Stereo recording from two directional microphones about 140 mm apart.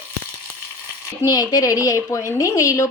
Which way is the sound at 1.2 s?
30° left (ahead or behind).